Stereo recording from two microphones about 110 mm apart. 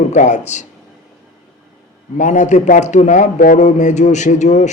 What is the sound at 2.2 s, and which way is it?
A man's voice, 90° left.